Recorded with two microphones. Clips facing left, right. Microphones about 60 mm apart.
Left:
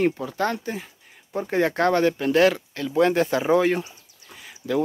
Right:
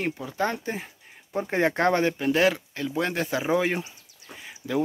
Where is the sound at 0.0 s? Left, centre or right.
Centre.